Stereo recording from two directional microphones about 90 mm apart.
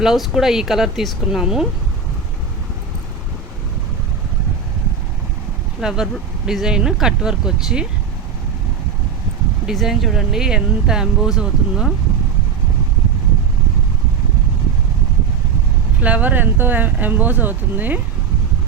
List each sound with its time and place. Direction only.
0.0 s speech: 5° right (ahead or behind)
5.8 s speech: 5° right (ahead or behind)
9.6 s speech: 5° right (ahead or behind)
16.0 s speech: 15° right (ahead or behind)